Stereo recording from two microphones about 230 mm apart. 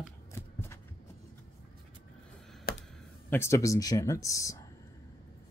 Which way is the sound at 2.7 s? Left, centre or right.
Left.